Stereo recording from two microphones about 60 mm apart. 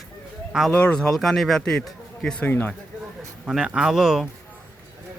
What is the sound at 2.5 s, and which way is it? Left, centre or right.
Speech, left.